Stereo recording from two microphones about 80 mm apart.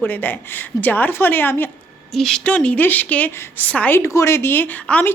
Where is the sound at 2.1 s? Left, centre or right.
Centre.